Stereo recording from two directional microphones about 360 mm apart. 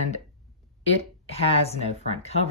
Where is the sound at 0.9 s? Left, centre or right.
Centre.